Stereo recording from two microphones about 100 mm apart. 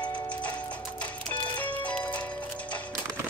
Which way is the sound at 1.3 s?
15° left (ahead or behind).